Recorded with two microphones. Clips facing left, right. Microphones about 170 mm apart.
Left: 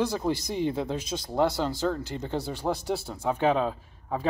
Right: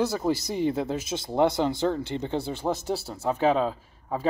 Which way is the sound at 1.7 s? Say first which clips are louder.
Right 2 dB; 25° right (ahead or behind).